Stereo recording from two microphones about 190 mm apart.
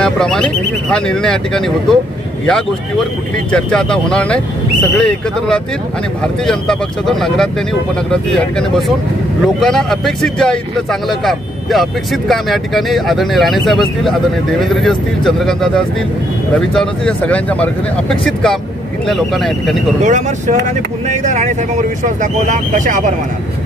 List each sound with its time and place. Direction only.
0.0 s speech: 5° left (ahead or behind)
3.5 s speech: 5° left (ahead or behind)
20.0 s speech: 40° right (ahead or behind)